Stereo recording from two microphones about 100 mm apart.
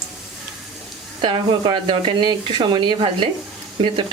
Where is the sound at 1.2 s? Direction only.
55° right (ahead or behind).